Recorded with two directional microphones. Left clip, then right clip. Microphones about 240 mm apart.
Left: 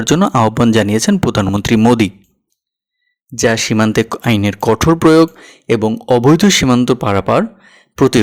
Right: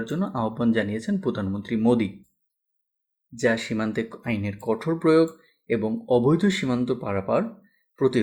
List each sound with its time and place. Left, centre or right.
0.0 s speech: left
3.3 s speech: left